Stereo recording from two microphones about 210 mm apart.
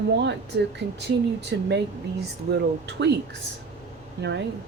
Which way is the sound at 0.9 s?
55° right (ahead or behind).